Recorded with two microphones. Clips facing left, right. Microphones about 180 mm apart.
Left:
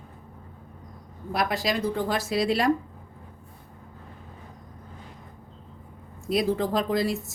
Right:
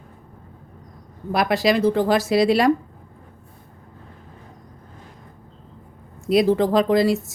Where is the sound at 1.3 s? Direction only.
80° right.